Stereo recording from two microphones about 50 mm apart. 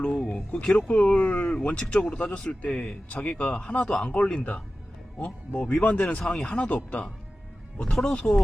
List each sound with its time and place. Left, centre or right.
0.0 s speech: centre
8.0 s speech: left